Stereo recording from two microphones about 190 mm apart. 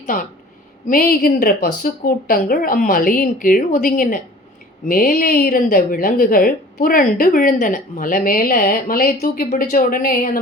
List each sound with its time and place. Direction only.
0.9 s speech: 50° left (ahead or behind)